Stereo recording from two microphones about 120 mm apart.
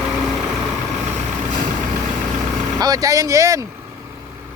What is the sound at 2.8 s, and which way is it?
Speech, 30° right (ahead or behind).